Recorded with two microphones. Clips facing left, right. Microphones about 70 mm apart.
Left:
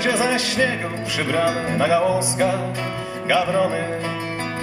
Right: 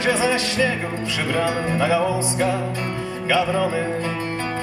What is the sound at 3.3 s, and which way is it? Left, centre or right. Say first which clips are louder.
Speech: left 1 dB; centre.